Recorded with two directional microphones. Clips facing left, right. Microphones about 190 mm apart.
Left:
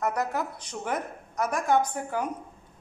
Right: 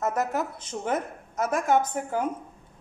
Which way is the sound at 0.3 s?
20° right (ahead or behind).